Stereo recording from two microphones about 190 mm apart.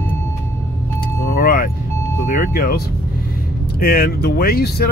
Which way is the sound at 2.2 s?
45° left (ahead or behind).